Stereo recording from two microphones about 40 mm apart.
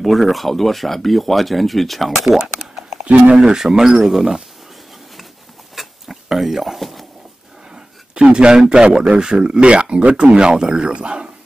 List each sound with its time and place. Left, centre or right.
0.0 s speech: centre
3.0 s speech: right
3.5 s speech: centre
5.8 s a sound: centre
7.7 s a sound: right
8.9 s speech: centre